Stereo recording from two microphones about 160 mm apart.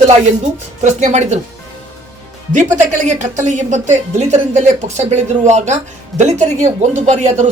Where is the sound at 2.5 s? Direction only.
50° right (ahead or behind).